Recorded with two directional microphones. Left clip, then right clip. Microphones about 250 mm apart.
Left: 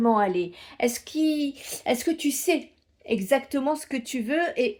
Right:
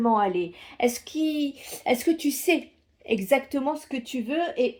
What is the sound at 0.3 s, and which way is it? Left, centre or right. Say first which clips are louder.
A woman's voice: even; left.